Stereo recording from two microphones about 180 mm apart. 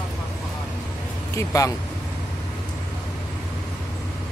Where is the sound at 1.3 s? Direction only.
20° left (ahead or behind).